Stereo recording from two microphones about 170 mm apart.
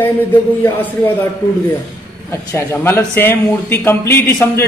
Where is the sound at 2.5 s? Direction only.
15° left (ahead or behind).